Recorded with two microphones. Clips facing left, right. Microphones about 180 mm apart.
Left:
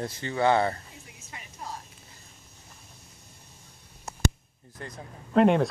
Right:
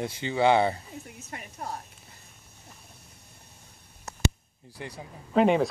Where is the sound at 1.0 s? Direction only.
55° right (ahead or behind).